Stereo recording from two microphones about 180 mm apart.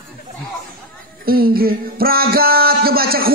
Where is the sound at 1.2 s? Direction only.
55° right (ahead or behind).